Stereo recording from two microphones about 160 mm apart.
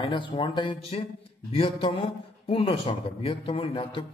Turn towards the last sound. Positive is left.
turn(degrees=35)  # may be behind; listen again after turning